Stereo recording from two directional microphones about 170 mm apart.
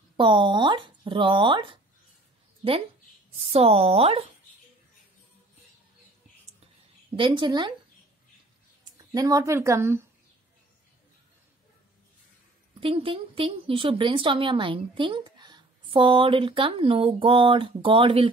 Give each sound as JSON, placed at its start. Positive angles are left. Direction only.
{"t": 0.2, "sound": "speech", "side_deg": -30}
{"t": 3.3, "sound": "speech", "side_deg": -35}
{"t": 7.2, "sound": "speech", "side_deg": -30}
{"t": 8.9, "sound": "speech", "side_deg": -20}
{"t": 12.8, "sound": "speech", "side_deg": -30}